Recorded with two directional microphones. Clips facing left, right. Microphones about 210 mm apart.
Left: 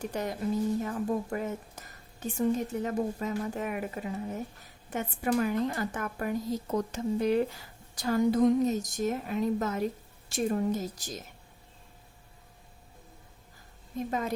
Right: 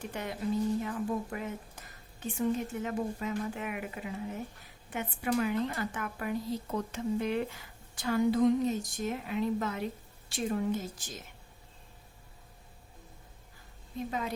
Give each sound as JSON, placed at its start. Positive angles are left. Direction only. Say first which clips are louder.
{"t": 0.0, "sound": "a woman's voice", "louder": "left 4 dB", "side_deg": 40}
{"t": 14.1, "sound": "a woman's voice", "louder": "left 4 dB", "side_deg": 45}